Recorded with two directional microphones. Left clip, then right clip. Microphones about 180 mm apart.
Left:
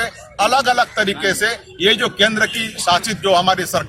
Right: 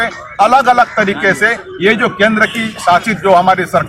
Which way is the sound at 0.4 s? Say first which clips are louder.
Right 6 dB; 45° left (ahead or behind).